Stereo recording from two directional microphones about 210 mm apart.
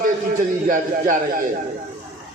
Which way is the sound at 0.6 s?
40° right (ahead or behind).